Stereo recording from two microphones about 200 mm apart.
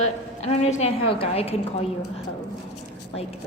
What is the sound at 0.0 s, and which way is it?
A woman's voice, 30° left (ahead or behind).